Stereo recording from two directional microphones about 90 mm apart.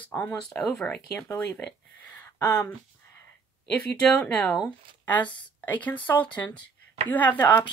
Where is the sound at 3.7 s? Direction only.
15° left (ahead or behind).